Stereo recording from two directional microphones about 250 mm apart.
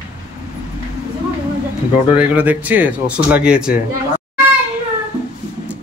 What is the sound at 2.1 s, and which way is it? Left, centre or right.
Speech, centre.